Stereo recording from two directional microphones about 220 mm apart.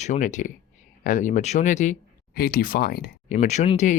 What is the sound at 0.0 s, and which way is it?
Speech, 35° left (ahead or behind).